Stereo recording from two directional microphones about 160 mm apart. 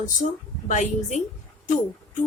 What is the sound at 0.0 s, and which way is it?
Speech, 50° left (ahead or behind).